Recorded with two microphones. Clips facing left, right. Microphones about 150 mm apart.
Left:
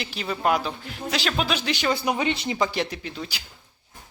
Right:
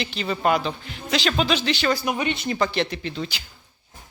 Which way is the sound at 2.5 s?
10° left (ahead or behind).